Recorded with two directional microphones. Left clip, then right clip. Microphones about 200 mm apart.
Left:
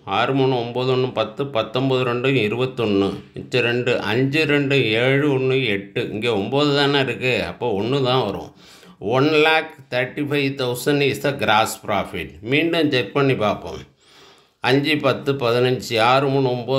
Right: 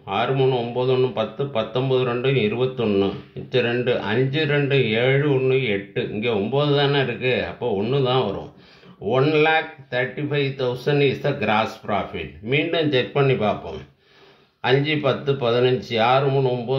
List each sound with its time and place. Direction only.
0.0 s speech: 40° left (ahead or behind)